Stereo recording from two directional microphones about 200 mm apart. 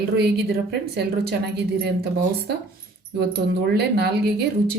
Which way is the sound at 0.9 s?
55° right (ahead or behind).